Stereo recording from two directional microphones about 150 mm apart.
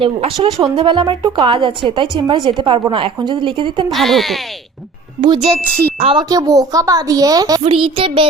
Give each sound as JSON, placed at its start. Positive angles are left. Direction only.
{"t": 0.0, "sound": "speech", "side_deg": -35}
{"t": 3.9, "sound": "speech", "side_deg": 0}
{"t": 5.2, "sound": "a woman's voice", "side_deg": -30}
{"t": 7.7, "sound": "speech", "side_deg": -35}